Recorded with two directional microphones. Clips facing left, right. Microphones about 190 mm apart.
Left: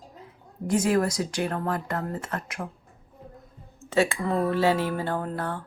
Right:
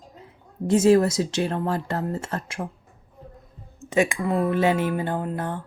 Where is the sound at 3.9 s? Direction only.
15° right (ahead or behind).